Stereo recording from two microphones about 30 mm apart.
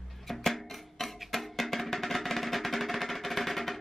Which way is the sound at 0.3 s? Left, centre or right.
Centre.